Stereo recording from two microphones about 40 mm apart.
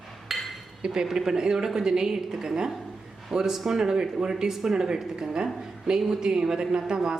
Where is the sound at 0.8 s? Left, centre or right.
Centre.